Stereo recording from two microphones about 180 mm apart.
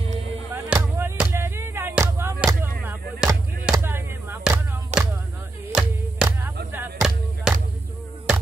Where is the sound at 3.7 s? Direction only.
15° right (ahead or behind).